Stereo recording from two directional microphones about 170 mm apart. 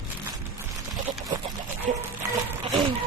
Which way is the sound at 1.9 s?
45° right (ahead or behind).